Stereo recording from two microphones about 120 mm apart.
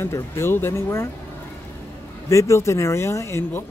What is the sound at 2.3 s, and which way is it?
Speech, 25° left (ahead or behind).